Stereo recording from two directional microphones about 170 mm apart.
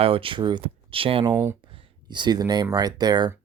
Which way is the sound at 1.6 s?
30° right (ahead or behind).